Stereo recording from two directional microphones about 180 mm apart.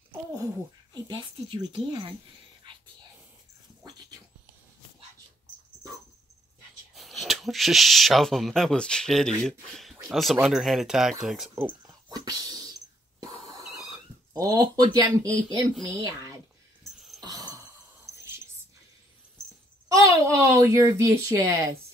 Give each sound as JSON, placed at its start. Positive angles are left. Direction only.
{"t": 1.0, "sound": "a woman's voice", "side_deg": -25}
{"t": 7.0, "sound": "speech", "side_deg": 0}
{"t": 11.5, "sound": "a sound", "side_deg": -15}
{"t": 14.3, "sound": "a woman's voice", "side_deg": -20}
{"t": 15.2, "sound": "speech", "side_deg": 5}
{"t": 17.2, "sound": "cough", "side_deg": -20}
{"t": 19.9, "sound": "speech", "side_deg": -20}